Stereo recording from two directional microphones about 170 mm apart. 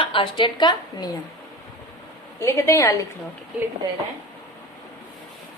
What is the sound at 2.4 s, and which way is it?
Speech, 15° left (ahead or behind).